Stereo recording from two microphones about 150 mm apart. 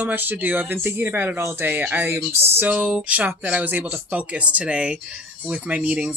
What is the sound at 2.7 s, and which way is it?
Speech, 5° right (ahead or behind).